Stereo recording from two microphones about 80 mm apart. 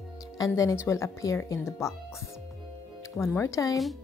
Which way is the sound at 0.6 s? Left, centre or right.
Left.